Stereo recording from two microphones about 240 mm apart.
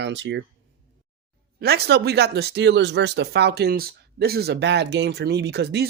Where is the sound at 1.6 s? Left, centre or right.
Right.